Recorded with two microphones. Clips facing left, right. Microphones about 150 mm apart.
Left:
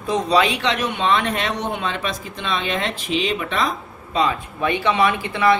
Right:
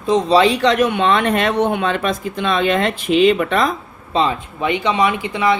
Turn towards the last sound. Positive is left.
turn(degrees=-15)  # may be behind; listen again after turning